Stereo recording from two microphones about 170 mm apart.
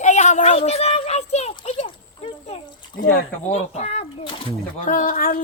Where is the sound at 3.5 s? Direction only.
40° left (ahead or behind).